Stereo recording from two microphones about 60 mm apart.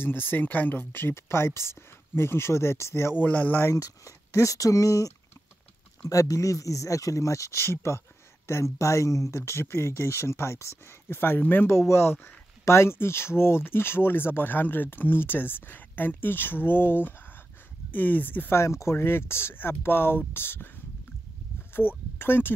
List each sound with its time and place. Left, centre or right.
0.0 s speech: left
3.2 s speech: left
3.7 s speech: left
7.6 s speech: left
8.7 s speech: left
18.5 s speech: left
21.7 s speech: left